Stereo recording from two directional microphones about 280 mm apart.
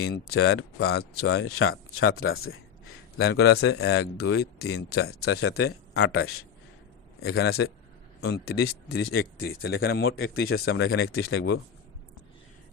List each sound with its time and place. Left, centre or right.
0.1 s speech: left
3.2 s speech: left
5.0 s speech: left
7.2 s speech: left